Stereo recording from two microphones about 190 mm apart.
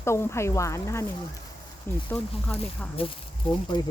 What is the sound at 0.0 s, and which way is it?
Speech, 15° left (ahead or behind).